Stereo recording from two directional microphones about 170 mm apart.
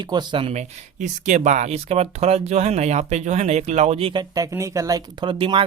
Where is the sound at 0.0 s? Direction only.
25° right (ahead or behind).